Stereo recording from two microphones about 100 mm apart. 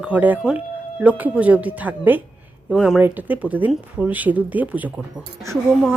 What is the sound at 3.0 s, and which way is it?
Speech, 20° right (ahead or behind).